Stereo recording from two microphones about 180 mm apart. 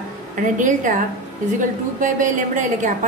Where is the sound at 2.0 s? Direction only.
45° right (ahead or behind).